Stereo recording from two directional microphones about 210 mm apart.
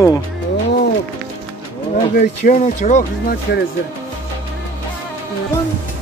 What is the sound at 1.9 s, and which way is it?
Speech, 40° left (ahead or behind).